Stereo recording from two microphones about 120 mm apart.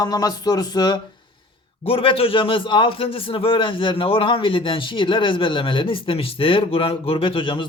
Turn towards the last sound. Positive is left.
turn(degrees=45)  # may be behind; listen again after turning